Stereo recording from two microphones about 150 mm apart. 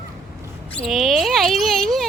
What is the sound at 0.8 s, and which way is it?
A woman's voice, centre (ahead or behind).